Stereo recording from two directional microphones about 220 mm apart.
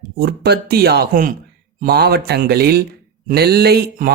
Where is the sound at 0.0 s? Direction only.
45° right (ahead or behind).